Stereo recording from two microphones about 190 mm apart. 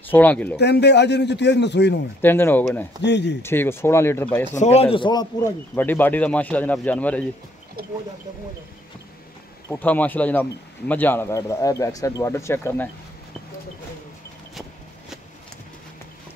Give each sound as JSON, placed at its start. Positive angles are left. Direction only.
{"t": 0.1, "sound": "speech", "side_deg": 10}
{"t": 0.6, "sound": "a man's voice", "side_deg": 60}
{"t": 2.2, "sound": "speech", "side_deg": 10}
{"t": 3.0, "sound": "a man's voice", "side_deg": 65}
{"t": 3.4, "sound": "speech", "side_deg": 10}
{"t": 4.6, "sound": "a man's voice", "side_deg": 35}
{"t": 5.8, "sound": "speech", "side_deg": 10}
{"t": 9.7, "sound": "speech", "side_deg": 10}